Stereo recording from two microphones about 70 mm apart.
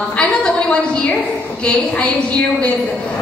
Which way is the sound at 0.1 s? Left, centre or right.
Centre.